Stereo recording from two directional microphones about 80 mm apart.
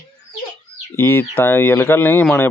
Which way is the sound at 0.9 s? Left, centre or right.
Left.